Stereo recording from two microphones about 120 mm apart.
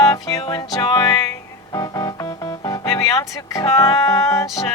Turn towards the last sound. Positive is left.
turn(degrees=25)  # may be behind; listen again after turning